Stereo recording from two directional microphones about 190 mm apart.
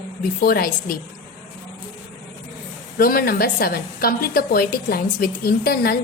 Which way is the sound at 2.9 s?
50° left (ahead or behind).